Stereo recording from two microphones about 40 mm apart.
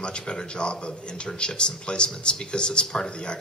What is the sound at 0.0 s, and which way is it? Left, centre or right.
Speech, left.